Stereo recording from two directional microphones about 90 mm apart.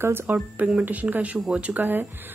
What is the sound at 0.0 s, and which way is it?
Speech, 25° right (ahead or behind).